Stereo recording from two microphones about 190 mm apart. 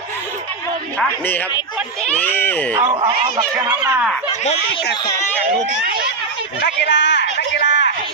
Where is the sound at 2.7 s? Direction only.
25° right (ahead or behind).